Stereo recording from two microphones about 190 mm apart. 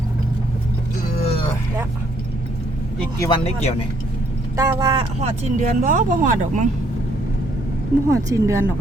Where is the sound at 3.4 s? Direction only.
35° left (ahead or behind).